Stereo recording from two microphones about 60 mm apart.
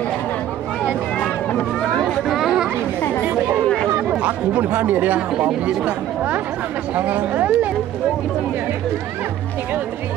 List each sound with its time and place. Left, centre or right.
1.2 s a sound: centre
2.2 s chatter: centre
4.1 s speech: right
5.4 s speech: centre
5.9 s speech: right